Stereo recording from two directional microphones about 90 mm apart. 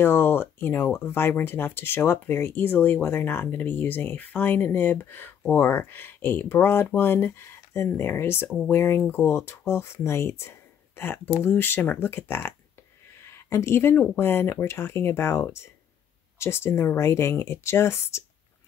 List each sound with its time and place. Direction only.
0.0 s speech: 25° left (ahead or behind)